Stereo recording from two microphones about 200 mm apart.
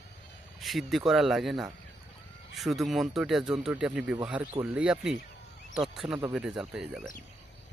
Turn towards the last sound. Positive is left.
turn(degrees=-5)  # may be behind; listen again after turning